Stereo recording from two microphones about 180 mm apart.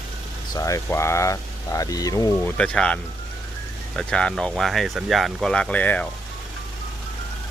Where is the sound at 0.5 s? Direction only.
20° left (ahead or behind).